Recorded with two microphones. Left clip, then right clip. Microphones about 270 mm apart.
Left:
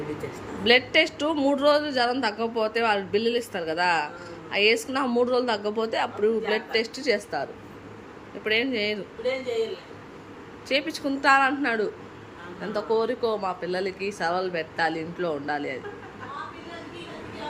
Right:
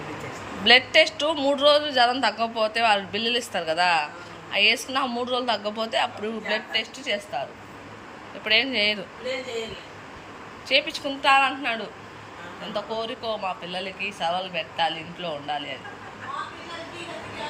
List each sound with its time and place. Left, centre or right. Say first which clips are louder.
0.6 s a woman's voice: right 3 dB; centre
8.4 s a woman's voice: right 3 dB; centre
10.7 s a woman's voice: right 3 dB; centre